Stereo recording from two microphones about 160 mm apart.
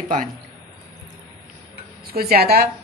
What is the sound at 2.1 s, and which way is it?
Speech, 75° right (ahead or behind).